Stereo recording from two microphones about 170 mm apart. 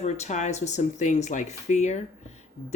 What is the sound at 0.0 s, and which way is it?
Speech, 45° left (ahead or behind).